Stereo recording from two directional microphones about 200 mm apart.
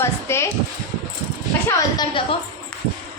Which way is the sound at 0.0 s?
15° left (ahead or behind).